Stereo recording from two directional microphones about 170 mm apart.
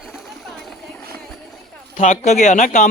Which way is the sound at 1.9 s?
45° left (ahead or behind).